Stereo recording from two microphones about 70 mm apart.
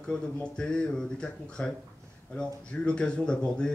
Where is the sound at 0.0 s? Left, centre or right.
Centre.